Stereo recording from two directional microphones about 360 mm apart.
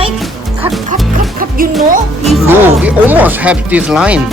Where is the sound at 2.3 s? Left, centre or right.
Centre.